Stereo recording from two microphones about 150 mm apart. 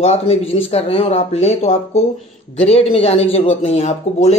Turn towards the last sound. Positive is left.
turn(degrees=45)  # may be behind; listen again after turning